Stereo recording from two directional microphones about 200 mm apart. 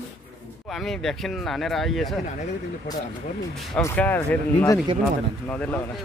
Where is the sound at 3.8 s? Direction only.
10° left (ahead or behind).